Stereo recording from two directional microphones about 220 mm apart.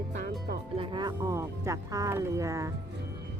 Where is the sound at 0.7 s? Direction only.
20° right (ahead or behind).